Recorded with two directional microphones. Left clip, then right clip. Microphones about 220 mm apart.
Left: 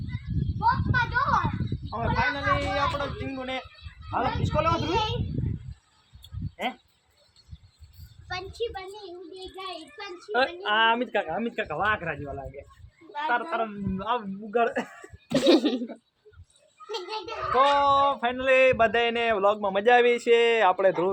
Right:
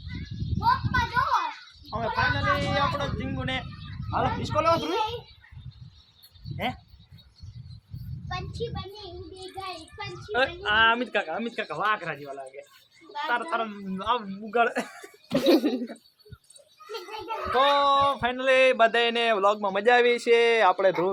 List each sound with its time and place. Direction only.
0.6 s a sound: 20° right (ahead or behind)
2.0 s speech: centre (ahead or behind)
6.6 s speech: 5° left (ahead or behind)
8.3 s a child's voice: 40° left (ahead or behind)
10.3 s a man's voice: 10° left (ahead or behind); by 14.9 s 15° right (ahead or behind)
15.3 s speech: centre (ahead or behind)
17.5 s speech: centre (ahead or behind)